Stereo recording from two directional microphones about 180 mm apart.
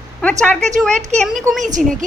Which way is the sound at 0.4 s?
5° left (ahead or behind).